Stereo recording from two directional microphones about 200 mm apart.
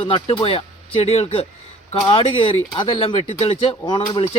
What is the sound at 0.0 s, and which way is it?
Speech, 30° left (ahead or behind).